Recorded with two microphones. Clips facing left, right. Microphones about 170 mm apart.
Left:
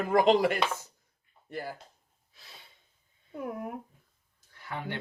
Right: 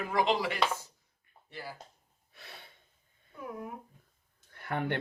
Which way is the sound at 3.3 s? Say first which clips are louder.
Left 5 dB; 60° left (ahead or behind).